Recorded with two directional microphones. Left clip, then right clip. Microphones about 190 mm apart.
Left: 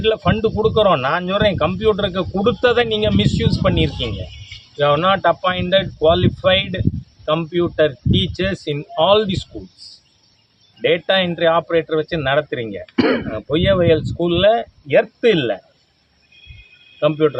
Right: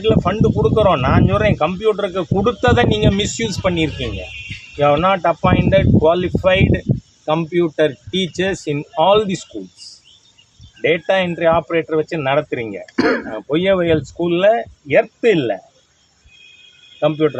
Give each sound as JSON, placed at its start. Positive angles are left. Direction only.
{"t": 0.0, "sound": "speech", "side_deg": 5}
{"t": 10.8, "sound": "speech", "side_deg": 0}
{"t": 13.0, "sound": "speech", "side_deg": 40}
{"t": 13.3, "sound": "speech", "side_deg": 5}
{"t": 17.0, "sound": "speech", "side_deg": 5}